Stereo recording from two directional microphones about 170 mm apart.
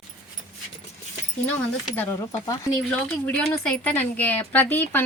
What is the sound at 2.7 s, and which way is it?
A woman's voice, 5° left (ahead or behind).